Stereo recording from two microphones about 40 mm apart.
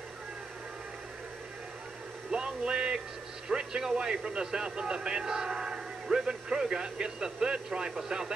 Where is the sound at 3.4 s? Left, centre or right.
Centre.